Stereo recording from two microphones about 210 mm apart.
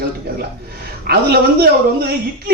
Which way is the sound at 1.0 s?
50° right (ahead or behind).